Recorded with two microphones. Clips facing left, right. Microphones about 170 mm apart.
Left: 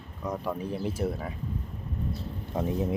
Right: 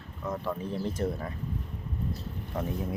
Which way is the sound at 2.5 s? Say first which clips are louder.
Left 4 dB; 20° left (ahead or behind).